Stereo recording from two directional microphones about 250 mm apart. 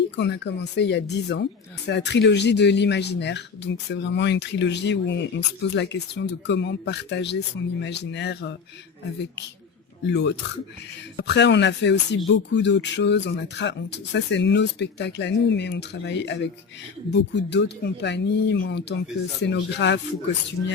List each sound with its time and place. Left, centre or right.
0.2 s speech: left
10.0 s speech: left